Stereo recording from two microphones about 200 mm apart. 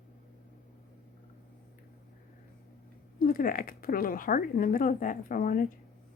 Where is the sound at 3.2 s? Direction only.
45° left (ahead or behind).